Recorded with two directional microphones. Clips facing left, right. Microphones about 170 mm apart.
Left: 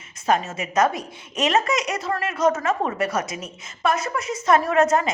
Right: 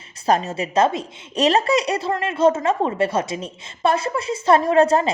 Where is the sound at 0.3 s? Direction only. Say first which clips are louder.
Right 3 dB; 35° right (ahead or behind).